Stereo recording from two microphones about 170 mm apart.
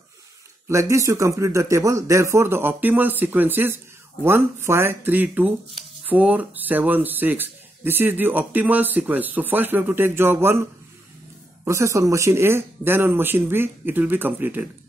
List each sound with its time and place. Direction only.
0.7 s speech: 15° right (ahead or behind)